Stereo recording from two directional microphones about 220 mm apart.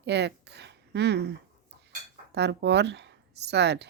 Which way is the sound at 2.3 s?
50° right (ahead or behind).